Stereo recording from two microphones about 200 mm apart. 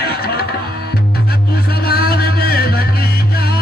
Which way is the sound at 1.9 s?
50° left (ahead or behind).